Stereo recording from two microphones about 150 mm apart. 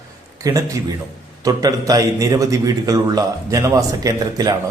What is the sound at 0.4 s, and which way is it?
A man's voice, 20° right (ahead or behind).